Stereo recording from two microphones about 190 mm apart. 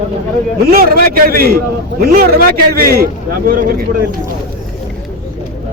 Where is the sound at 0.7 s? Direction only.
50° right (ahead or behind).